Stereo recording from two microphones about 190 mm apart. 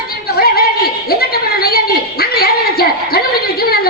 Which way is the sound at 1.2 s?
55° left (ahead or behind).